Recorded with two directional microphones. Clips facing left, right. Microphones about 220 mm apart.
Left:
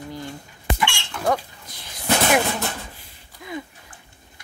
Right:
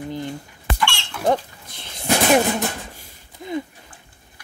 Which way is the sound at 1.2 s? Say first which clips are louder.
Right 3 dB; 25° right (ahead or behind).